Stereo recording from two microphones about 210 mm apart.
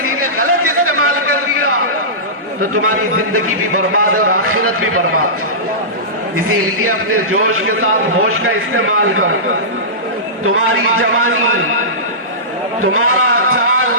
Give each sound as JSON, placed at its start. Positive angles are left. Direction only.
{"t": 0.0, "sound": "chatter", "side_deg": -90}
{"t": 2.8, "sound": "a man's voice", "side_deg": -90}
{"t": 6.5, "sound": "a man's voice", "side_deg": -90}
{"t": 10.4, "sound": "a man's voice", "side_deg": -85}
{"t": 12.8, "sound": "a sound", "side_deg": -90}